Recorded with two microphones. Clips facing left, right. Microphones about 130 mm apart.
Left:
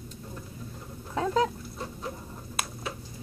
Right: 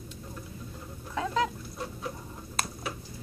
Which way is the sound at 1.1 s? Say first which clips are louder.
Left 3 dB; 35° left (ahead or behind).